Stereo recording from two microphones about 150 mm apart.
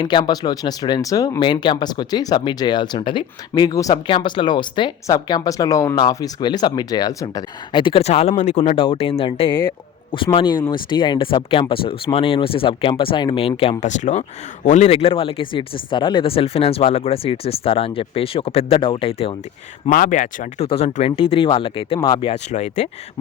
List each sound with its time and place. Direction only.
0.0 s speech: 25° left (ahead or behind); by 8.7 s 55° left (ahead or behind)
8.7 s speech: 35° left (ahead or behind)
13.8 s speech: 55° left (ahead or behind); by 19.3 s 35° left (ahead or behind)
19.9 s speech: 60° left (ahead or behind)
20.7 s speech: 45° left (ahead or behind)
22.5 s speech: 50° left (ahead or behind)